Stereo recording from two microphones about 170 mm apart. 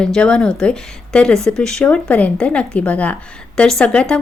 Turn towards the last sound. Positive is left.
turn(degrees=5)  # may be behind; listen again after turning